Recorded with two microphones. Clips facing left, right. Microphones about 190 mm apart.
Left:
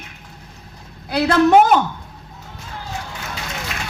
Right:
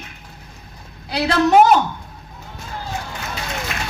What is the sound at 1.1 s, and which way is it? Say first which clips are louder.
Speech: left 2 dB; 55° left (ahead or behind).